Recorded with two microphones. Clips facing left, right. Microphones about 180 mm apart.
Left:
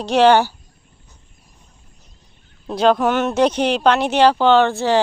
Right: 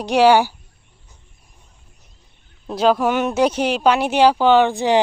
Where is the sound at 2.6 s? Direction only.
5° right (ahead or behind).